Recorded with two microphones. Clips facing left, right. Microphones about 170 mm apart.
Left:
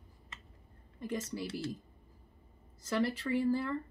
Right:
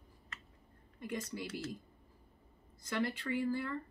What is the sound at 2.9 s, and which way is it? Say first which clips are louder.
Speech: left 4 dB; 30° left (ahead or behind).